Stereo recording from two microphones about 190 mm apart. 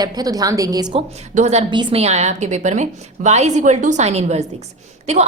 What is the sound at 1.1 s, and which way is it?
A woman's voice, 35° right (ahead or behind).